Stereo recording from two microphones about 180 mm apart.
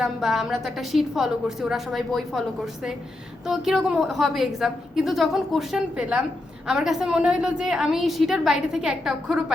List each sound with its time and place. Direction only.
0.0 s a woman's voice: centre (ahead or behind)